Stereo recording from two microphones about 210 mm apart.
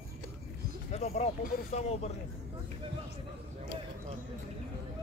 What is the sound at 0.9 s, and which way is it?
Speech, 30° left (ahead or behind).